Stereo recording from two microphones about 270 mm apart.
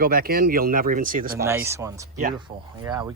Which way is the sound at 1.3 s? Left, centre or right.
Centre.